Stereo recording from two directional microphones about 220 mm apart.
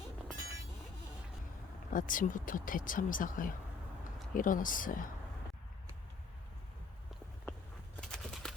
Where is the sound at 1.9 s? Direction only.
35° left (ahead or behind).